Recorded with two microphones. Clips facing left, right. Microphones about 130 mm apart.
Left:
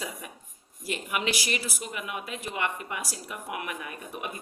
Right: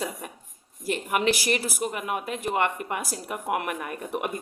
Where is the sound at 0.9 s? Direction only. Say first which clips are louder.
Right 6 dB; 45° right (ahead or behind).